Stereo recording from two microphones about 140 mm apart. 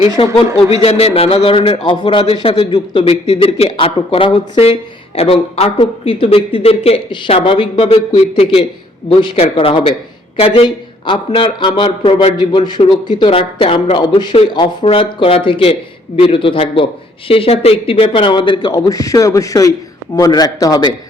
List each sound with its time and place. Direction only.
0.2 s a man's voice: 40° left (ahead or behind)
3.1 s a man's voice: 45° left (ahead or behind); by 20.9 s 25° left (ahead or behind)